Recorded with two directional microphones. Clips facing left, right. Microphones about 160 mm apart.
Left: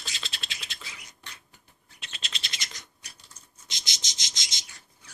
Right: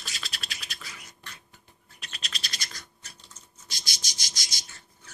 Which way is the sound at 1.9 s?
25° left (ahead or behind).